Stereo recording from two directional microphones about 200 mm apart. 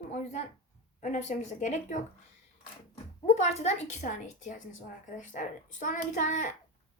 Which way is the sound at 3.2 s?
35° left (ahead or behind).